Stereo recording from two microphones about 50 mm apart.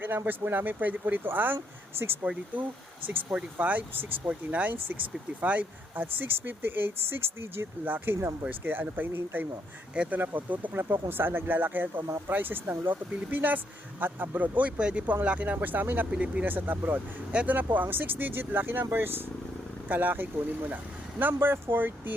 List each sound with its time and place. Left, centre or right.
0.3 s speech: right
7.9 s speech: right
9.9 s speech: right
10.2 s speech: right
10.8 s speech: right
15.6 s speech: right
16.1 s speech: right
16.5 s speech: right
19.9 s speech: right